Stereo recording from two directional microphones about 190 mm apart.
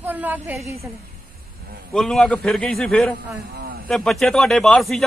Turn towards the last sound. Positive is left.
turn(degrees=0)  # may be behind; listen again after turning